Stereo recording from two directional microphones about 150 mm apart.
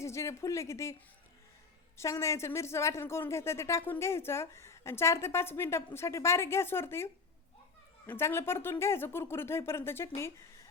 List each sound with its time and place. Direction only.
0.0 s speech: 20° left (ahead or behind)
2.0 s speech: 20° left (ahead or behind)